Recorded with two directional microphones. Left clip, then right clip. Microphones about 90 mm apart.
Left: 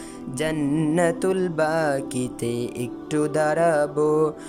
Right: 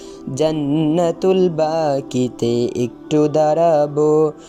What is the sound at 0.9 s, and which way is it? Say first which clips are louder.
Music: right 5 dB; 20° right (ahead or behind).